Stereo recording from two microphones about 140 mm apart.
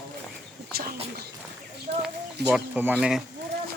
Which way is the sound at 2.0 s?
5° right (ahead or behind).